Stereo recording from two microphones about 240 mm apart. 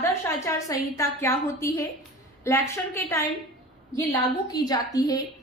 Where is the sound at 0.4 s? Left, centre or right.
Centre.